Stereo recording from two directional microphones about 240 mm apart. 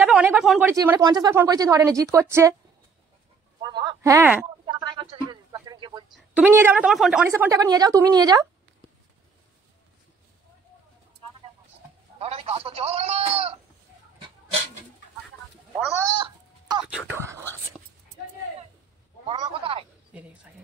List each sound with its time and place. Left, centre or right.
0.0 s speech: centre
3.6 s speech: centre
4.6 s a sound: centre
6.1 s a woman's voice: centre
12.2 s speech: right
16.2 s chicken: centre
16.8 s speech: centre
19.2 s speech: right